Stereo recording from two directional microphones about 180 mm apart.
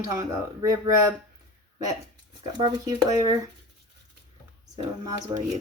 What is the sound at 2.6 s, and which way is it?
Speech, 25° right (ahead or behind).